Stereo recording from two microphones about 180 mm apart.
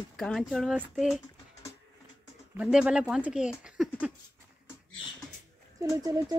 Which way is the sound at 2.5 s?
5° right (ahead or behind).